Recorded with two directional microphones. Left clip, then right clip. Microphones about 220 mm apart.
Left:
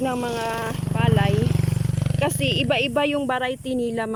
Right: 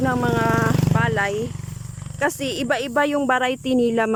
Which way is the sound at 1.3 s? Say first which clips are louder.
Left 2 dB; 45° left (ahead or behind).